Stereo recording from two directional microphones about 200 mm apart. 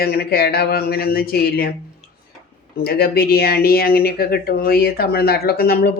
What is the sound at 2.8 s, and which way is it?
Speech, 50° left (ahead or behind).